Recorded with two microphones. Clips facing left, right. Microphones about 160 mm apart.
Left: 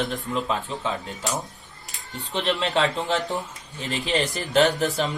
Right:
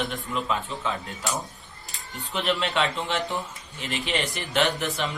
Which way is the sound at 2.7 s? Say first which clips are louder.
Left 3 dB; 40° left (ahead or behind).